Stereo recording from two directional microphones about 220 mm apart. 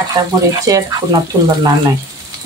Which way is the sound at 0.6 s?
15° right (ahead or behind).